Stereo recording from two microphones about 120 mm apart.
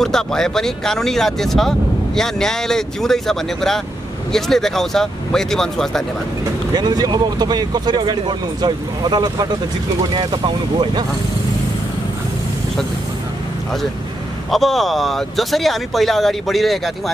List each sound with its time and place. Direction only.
0.0 s speech: 5° left (ahead or behind)
6.7 s speech: 35° right (ahead or behind)
14.5 s speech: centre (ahead or behind)